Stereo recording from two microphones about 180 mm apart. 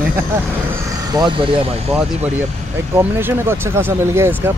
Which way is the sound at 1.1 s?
25° right (ahead or behind).